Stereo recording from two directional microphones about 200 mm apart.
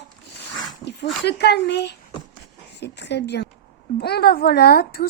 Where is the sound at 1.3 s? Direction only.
55° left (ahead or behind).